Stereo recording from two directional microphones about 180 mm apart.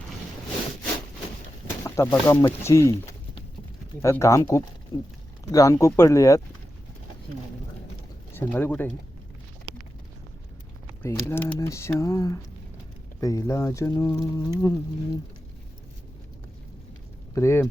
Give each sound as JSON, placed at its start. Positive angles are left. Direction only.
{"t": 1.8, "sound": "speech", "side_deg": 15}
{"t": 8.3, "sound": "speech", "side_deg": 10}
{"t": 11.0, "sound": "speech", "side_deg": 15}
{"t": 17.3, "sound": "speech", "side_deg": 15}